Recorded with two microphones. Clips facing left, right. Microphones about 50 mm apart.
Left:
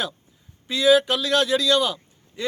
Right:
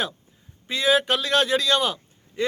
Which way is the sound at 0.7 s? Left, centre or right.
Right.